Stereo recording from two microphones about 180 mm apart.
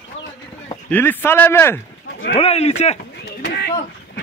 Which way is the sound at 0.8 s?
10° left (ahead or behind).